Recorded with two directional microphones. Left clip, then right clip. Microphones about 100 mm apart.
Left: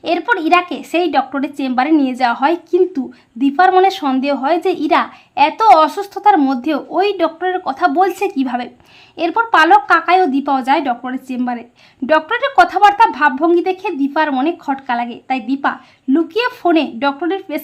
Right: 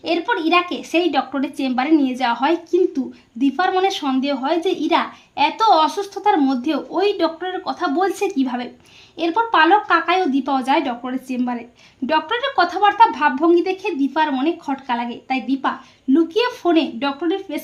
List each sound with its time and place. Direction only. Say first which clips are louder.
0.2 s a woman's voice: left 4 dB; 60° left (ahead or behind)
4.9 s a child's voice: left 5 dB; 40° left (ahead or behind)
5.5 s speech: left 5 dB; 60° left (ahead or behind)
8.2 s a woman's voice: left 3 dB; 35° left (ahead or behind)
12.0 s speech: left 5 dB; 50° left (ahead or behind)
14.8 s a woman's voice: left 3 dB; 30° left (ahead or behind)
16.1 s speech: left 1 dB; 50° left (ahead or behind)